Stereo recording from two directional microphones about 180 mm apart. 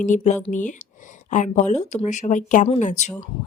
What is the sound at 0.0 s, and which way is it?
Speech, 45° left (ahead or behind).